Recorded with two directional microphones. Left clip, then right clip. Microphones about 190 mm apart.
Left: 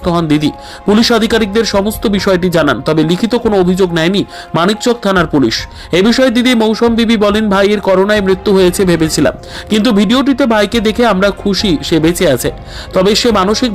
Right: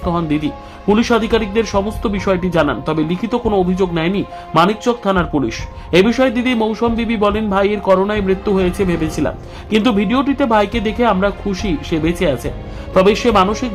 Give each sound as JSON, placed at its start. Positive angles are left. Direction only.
{"t": 0.0, "sound": "speech", "side_deg": 25}